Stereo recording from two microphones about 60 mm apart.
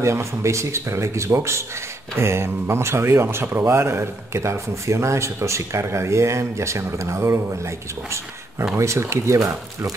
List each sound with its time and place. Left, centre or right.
0.0 s speech: right